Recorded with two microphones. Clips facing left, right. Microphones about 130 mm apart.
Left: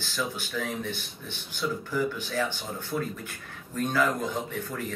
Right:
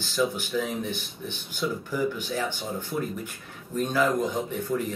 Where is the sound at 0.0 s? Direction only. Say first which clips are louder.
Right 6 dB; 15° right (ahead or behind).